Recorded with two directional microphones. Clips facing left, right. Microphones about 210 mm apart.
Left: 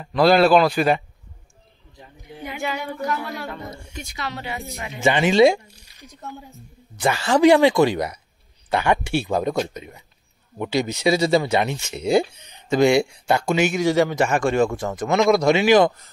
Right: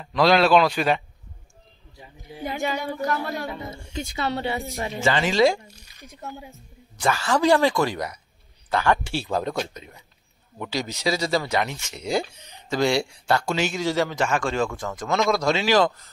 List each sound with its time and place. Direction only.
0.0 s a man's voice: 5° left (ahead or behind)
2.4 s female singing: 35° right (ahead or behind)
3.4 s a man's voice: centre (ahead or behind)
4.1 s a woman's voice: 30° right (ahead or behind)
5.0 s a man's voice: 20° left (ahead or behind)
10.6 s a man's voice: 25° left (ahead or behind)